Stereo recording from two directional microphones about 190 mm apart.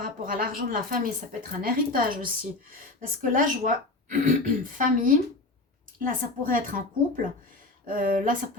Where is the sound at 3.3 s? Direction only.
45° right (ahead or behind).